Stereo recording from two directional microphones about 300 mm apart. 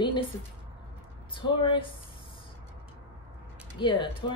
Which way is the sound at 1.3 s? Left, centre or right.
Centre.